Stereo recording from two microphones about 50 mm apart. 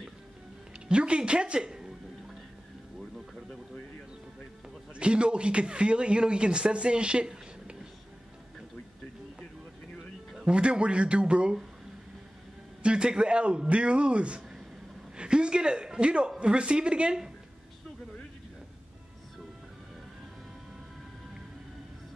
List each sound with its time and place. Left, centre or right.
0.8 s a woman's voice: right
4.9 s speech: right
10.4 s speech: right
12.8 s a woman's voice: centre